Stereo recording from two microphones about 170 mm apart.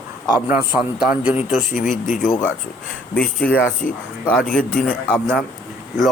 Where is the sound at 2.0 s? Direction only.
50° left (ahead or behind).